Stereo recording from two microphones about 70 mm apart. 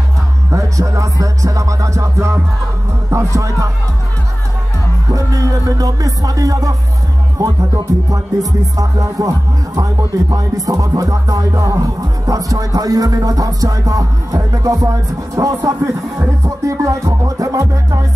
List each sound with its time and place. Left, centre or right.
0.5 s music: right
5.1 s music: right